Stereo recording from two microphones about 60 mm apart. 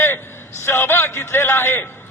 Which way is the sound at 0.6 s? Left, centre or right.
Left.